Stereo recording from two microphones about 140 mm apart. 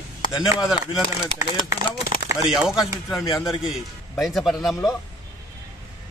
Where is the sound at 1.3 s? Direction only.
30° left (ahead or behind).